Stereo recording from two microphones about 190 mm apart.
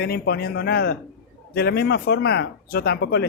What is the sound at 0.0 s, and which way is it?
Speech, 55° left (ahead or behind).